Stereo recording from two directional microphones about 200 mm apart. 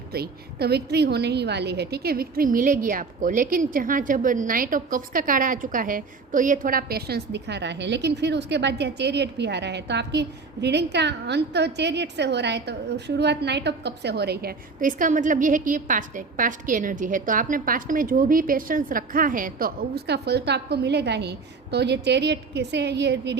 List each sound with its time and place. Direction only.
0.1 s a woman's voice: 50° right (ahead or behind)